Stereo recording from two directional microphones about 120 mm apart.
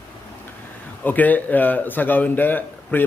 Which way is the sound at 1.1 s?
15° left (ahead or behind).